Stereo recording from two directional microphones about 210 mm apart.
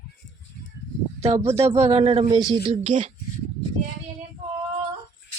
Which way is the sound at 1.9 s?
25° right (ahead or behind).